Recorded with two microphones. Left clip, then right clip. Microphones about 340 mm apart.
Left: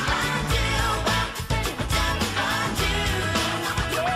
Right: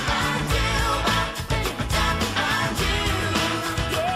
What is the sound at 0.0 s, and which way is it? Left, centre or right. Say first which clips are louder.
Music: right 1 dB; centre.